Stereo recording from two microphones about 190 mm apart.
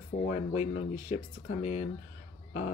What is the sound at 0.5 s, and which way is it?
Speech, 35° left (ahead or behind).